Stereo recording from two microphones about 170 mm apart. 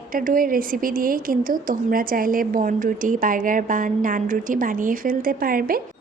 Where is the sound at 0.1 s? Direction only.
55° right (ahead or behind).